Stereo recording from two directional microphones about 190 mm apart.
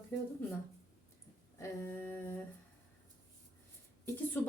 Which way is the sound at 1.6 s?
10° left (ahead or behind).